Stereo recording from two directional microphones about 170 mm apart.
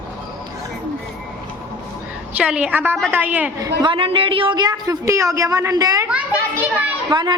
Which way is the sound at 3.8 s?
30° right (ahead or behind).